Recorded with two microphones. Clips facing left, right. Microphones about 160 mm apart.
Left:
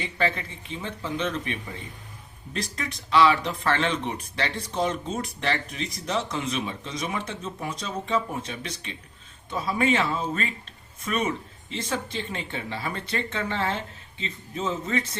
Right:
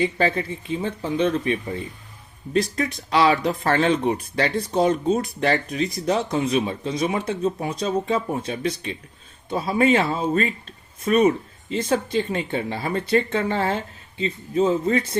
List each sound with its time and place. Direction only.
0.0 s speech: 35° right (ahead or behind)